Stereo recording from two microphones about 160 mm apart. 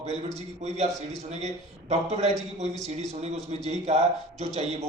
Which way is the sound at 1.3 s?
45° right (ahead or behind).